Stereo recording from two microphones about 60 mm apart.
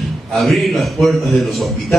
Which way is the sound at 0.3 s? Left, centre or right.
Centre.